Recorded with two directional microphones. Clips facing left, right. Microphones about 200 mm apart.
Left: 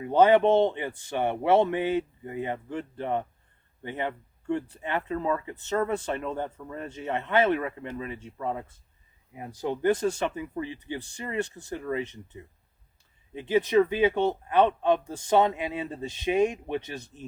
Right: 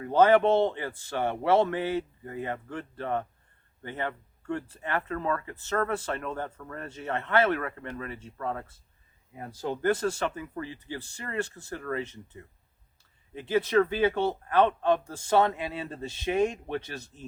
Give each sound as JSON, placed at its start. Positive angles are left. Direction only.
{"t": 0.0, "sound": "speech", "side_deg": 15}